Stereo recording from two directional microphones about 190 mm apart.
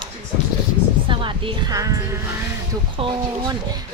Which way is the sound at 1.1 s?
25° right (ahead or behind).